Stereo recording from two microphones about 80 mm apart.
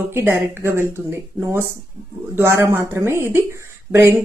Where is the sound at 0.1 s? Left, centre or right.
Right.